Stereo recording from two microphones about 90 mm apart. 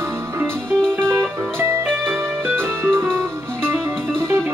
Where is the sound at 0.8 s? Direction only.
5° left (ahead or behind).